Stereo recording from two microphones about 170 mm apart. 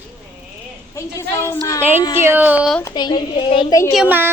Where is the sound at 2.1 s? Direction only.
10° right (ahead or behind).